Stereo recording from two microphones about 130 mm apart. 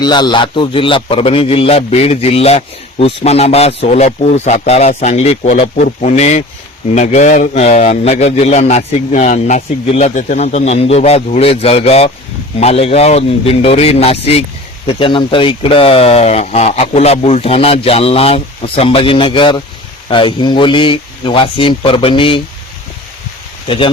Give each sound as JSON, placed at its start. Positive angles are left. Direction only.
{"t": 0.0, "sound": "a man's voice", "side_deg": 35}
{"t": 9.8, "sound": "a man's voice", "side_deg": 55}
{"t": 23.6, "sound": "speech", "side_deg": 40}